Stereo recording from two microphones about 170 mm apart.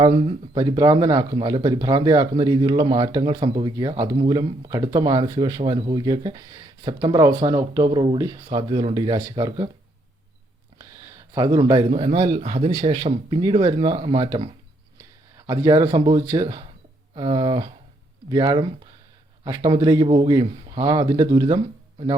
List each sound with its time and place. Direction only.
0.0 s speech: 35° right (ahead or behind)
10.8 s a sound: 20° right (ahead or behind)
11.9 s speech: 30° right (ahead or behind)
15.4 s speech: 25° right (ahead or behind)
19.7 s speech: 25° right (ahead or behind)